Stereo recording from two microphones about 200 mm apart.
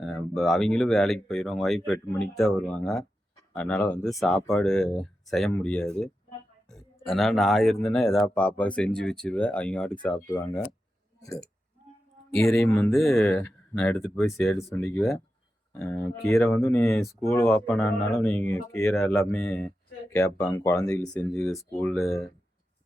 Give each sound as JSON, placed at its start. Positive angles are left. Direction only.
{"t": 0.0, "sound": "speech", "side_deg": 0}
{"t": 11.2, "sound": "speech", "side_deg": 15}
{"t": 12.5, "sound": "speech", "side_deg": 10}
{"t": 21.4, "sound": "speech", "side_deg": 0}